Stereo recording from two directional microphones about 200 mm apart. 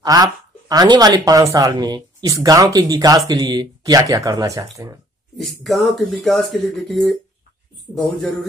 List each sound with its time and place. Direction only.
0.0 s speech: 20° right (ahead or behind)
5.4 s speech: centre (ahead or behind)